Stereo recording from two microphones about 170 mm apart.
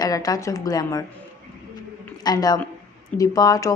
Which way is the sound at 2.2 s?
25° left (ahead or behind).